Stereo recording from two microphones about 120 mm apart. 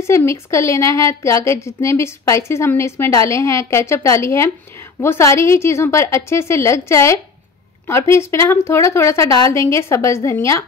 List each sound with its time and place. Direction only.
0.0 s a woman's voice: 25° left (ahead or behind)